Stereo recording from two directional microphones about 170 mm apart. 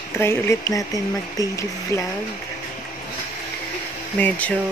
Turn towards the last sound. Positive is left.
turn(degrees=10)  # may be behind; listen again after turning